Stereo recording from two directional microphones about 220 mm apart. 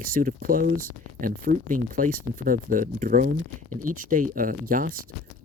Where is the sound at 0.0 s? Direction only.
40° right (ahead or behind).